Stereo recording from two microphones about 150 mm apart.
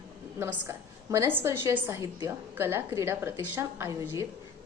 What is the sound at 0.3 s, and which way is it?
A woman's voice, 15° right (ahead or behind).